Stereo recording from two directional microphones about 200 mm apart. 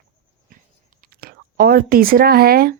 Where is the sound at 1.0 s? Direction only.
50° right (ahead or behind).